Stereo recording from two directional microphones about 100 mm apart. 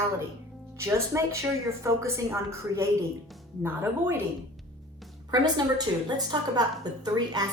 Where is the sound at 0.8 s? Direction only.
30° right (ahead or behind).